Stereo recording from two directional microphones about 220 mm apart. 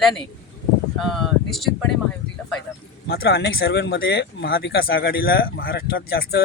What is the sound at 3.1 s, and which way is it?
Speech, 45° left (ahead or behind).